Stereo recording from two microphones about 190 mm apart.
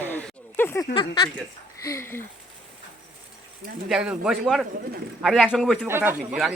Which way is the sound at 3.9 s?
5° right (ahead or behind).